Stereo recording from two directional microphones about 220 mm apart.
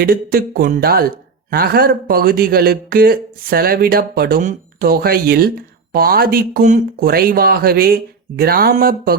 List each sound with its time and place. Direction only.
0.0 s speech: 45° right (ahead or behind)